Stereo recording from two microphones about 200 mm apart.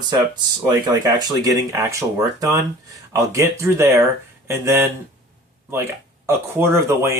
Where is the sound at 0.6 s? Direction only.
20° right (ahead or behind).